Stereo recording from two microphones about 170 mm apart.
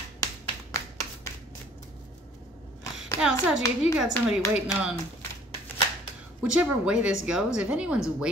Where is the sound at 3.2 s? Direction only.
5° right (ahead or behind).